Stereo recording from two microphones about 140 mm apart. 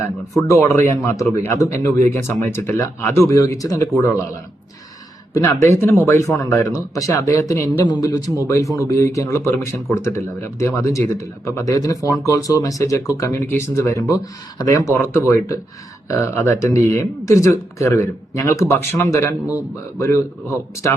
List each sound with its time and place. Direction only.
0.9 s speech: 20° left (ahead or behind)
5.3 s speech: 25° left (ahead or behind)